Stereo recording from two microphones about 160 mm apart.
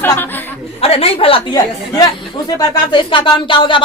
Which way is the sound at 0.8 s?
35° left (ahead or behind).